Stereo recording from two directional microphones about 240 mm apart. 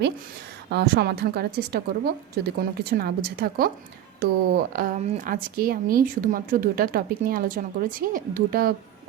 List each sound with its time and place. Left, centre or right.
0.7 s a woman's voice: right